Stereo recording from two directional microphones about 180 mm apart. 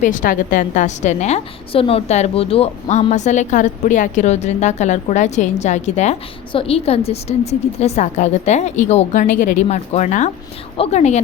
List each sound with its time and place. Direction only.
0.0 s a woman's voice: 45° left (ahead or behind)